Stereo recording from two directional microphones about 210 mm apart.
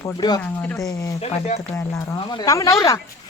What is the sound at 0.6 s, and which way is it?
Speech, 5° left (ahead or behind).